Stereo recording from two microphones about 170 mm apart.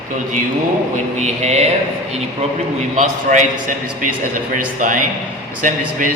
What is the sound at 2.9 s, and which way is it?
A man's voice, 45° right (ahead or behind).